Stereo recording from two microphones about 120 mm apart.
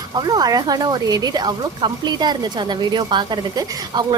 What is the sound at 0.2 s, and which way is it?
A woman's voice, 35° right (ahead or behind).